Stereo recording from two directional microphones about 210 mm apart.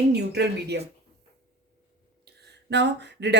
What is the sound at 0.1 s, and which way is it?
Speech, 55° right (ahead or behind).